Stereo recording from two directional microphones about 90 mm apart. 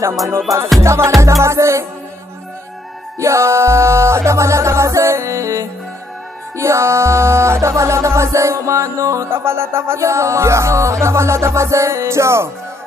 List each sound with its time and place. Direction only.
0.7 s music: 30° right (ahead or behind)
3.2 s music: 30° right (ahead or behind)